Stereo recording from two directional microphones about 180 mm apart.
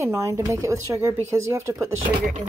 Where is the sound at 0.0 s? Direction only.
15° right (ahead or behind).